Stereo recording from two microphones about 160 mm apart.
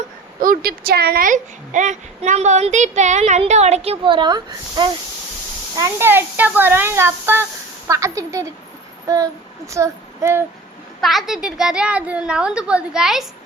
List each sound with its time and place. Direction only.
0.3 s speech: 60° right (ahead or behind); by 4.9 s 30° right (ahead or behind)
5.7 s a woman's voice: 15° right (ahead or behind)
9.0 s child singing: 20° right (ahead or behind)
11.0 s a woman's voice: centre (ahead or behind)